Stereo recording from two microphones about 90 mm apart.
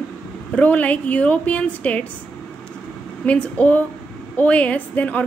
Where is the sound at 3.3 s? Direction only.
15° left (ahead or behind).